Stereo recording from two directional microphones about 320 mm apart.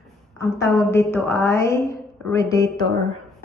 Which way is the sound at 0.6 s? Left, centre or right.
Centre.